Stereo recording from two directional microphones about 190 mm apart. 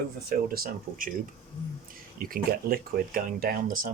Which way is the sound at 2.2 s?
50° right (ahead or behind).